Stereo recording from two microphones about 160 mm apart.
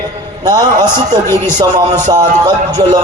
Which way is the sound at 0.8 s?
15° left (ahead or behind).